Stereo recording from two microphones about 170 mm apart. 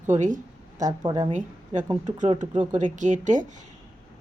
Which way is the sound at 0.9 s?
25° right (ahead or behind).